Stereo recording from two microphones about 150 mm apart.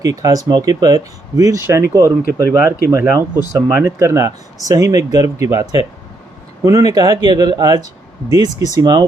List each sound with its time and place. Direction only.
0.0 s speech: 25° right (ahead or behind)